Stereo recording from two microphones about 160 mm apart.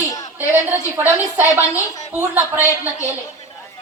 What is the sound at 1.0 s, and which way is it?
A woman's voice, 10° right (ahead or behind).